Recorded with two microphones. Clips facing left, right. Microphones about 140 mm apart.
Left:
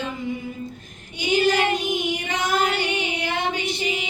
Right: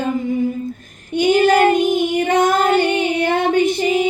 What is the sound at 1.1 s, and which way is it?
Child singing, 55° right (ahead or behind).